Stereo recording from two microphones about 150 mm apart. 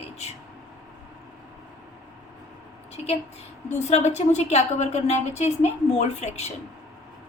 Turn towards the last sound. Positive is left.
turn(degrees=45)  # may be behind; listen again after turning